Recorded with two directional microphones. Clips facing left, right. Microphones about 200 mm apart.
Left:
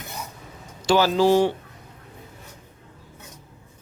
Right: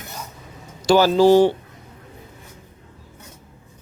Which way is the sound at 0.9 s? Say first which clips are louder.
Right 4 dB; 40° right (ahead or behind).